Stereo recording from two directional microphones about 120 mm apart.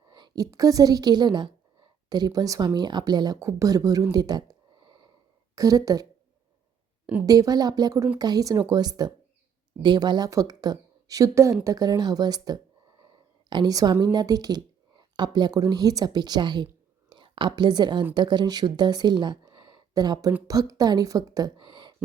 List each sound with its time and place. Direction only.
0.1 s a woman's voice: 35° right (ahead or behind)
4.1 s a sound: 35° right (ahead or behind)
5.5 s a woman's voice: 30° right (ahead or behind)
7.3 s a woman's voice: 30° right (ahead or behind)